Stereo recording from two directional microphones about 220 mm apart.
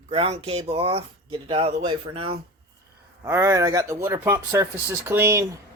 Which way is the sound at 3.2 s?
10° right (ahead or behind).